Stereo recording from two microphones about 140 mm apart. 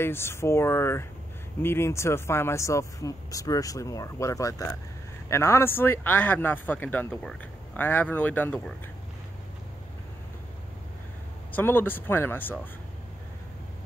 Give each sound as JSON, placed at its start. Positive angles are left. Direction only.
{"t": 0.0, "sound": "speech", "side_deg": 15}
{"t": 11.5, "sound": "speech", "side_deg": 15}